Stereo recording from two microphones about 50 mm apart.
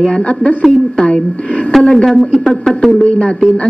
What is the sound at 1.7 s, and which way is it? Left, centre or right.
Speech, centre.